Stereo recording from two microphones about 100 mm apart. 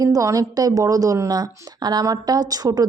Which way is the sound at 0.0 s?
35° right (ahead or behind).